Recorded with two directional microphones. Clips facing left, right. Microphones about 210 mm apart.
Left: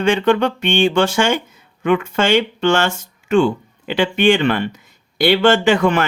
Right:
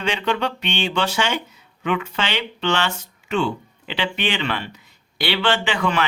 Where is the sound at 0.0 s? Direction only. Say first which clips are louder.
Left 8 dB; 50° left (ahead or behind).